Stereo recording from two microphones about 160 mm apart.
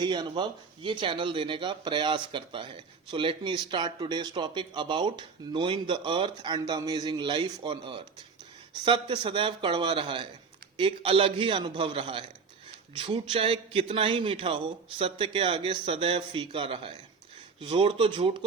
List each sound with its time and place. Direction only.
0.0 s a man's voice: 30° right (ahead or behind)